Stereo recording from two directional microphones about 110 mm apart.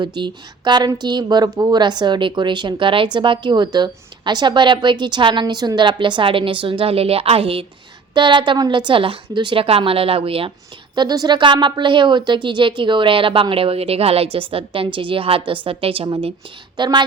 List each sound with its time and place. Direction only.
0.0 s speech: 45° right (ahead or behind); by 7.6 s 60° right (ahead or behind)
8.1 s speech: 45° right (ahead or behind)
10.9 s a woman's voice: 40° right (ahead or behind); by 16.3 s 55° right (ahead or behind)
16.7 s a woman's voice: 45° right (ahead or behind)